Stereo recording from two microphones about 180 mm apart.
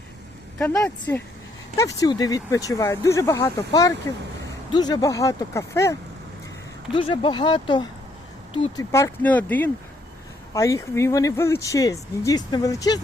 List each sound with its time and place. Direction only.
1.1 s speech: 15° left (ahead or behind)
6.9 s speech: 30° left (ahead or behind)
8.8 s speech: 15° left (ahead or behind)